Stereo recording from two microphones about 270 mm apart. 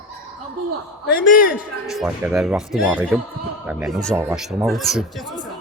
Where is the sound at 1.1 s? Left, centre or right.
Left.